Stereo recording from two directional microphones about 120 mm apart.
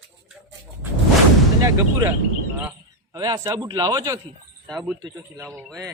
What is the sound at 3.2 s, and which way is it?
A man's voice, 30° right (ahead or behind).